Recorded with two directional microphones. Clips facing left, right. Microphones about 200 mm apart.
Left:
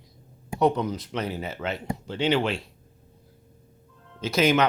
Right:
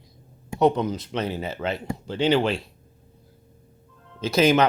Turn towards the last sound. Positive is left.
turn(degrees=-30)  # may be behind; listen again after turning